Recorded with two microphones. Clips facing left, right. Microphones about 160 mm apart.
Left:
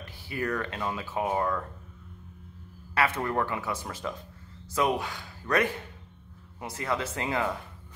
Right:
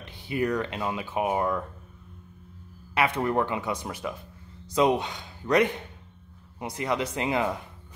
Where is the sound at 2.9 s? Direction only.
20° right (ahead or behind).